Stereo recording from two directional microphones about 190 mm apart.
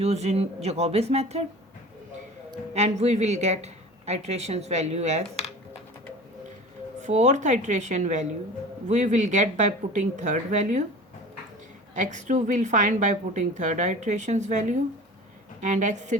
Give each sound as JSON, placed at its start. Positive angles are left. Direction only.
{"t": 0.0, "sound": "a woman's voice", "side_deg": -35}
{"t": 2.7, "sound": "a woman's voice", "side_deg": -35}
{"t": 7.0, "sound": "a woman's voice", "side_deg": -40}
{"t": 11.9, "sound": "a woman's voice", "side_deg": -40}